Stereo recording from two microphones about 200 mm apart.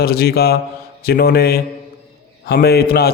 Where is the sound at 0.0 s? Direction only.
50° left (ahead or behind).